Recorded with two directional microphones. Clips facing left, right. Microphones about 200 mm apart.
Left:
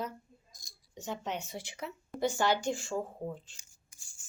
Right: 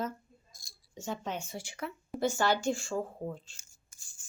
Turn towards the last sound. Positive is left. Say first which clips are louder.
# even
turn(degrees=15)  # may be behind; listen again after turning